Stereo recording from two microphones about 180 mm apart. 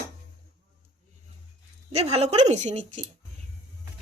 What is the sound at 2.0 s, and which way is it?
Speech, 35° right (ahead or behind).